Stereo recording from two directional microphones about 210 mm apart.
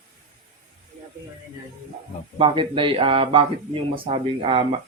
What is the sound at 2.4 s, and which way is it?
Speech, 25° right (ahead or behind).